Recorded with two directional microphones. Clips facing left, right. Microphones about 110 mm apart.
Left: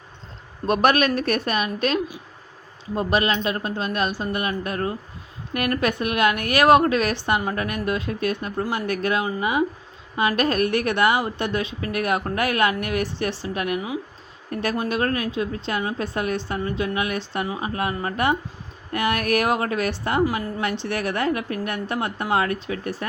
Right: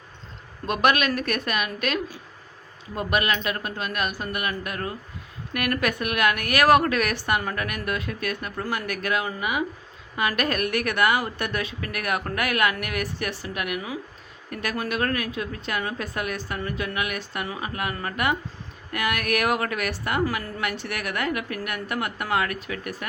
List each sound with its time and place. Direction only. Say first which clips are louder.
0.7 s a woman's voice: left 3 dB; 35° left (ahead or behind)
20.2 s a woman's voice: left 3 dB; 15° left (ahead or behind)
20.6 s a woman's voice: left 4 dB; 30° left (ahead or behind)